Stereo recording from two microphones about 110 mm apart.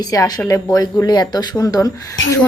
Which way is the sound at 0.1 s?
30° left (ahead or behind).